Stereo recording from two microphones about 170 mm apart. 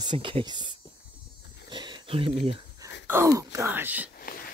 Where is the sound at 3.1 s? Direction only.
15° right (ahead or behind).